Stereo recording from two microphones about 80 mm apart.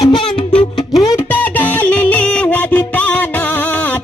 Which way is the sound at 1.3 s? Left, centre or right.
Left.